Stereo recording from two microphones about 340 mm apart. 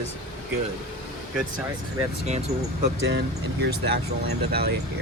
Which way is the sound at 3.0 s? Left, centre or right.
Right.